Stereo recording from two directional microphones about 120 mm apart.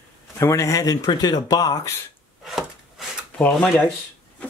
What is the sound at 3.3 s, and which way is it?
Speech, 10° left (ahead or behind).